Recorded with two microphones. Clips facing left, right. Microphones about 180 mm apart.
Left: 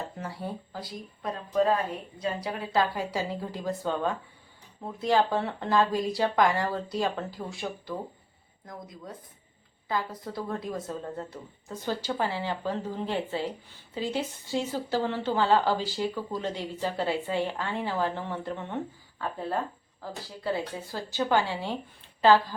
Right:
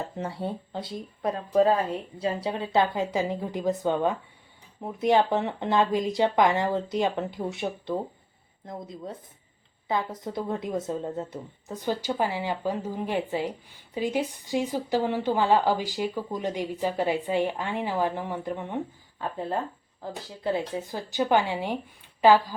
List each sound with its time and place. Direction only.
0.2 s a woman's voice: 25° right (ahead or behind)
20.0 s a woman's voice: 20° right (ahead or behind)